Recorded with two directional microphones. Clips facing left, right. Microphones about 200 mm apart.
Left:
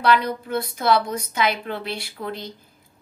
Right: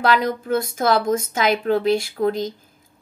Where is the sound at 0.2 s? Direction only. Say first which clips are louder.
Right 4 dB; 45° right (ahead or behind).